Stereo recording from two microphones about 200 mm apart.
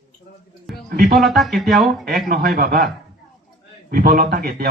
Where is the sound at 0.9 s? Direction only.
50° right (ahead or behind).